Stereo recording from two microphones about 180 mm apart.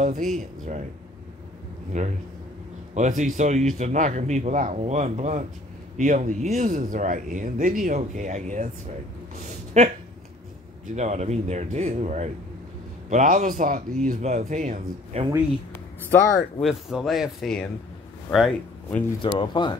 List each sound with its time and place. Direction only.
0.0 s speech: 45° right (ahead or behind)
1.9 s a man's voice: 40° right (ahead or behind)
9.4 s a sound: 40° right (ahead or behind)
11.0 s a man's voice: 40° right (ahead or behind)
16.1 s speech: 10° left (ahead or behind)
16.6 s a man's voice: centre (ahead or behind)
19.2 s speech: 25° left (ahead or behind)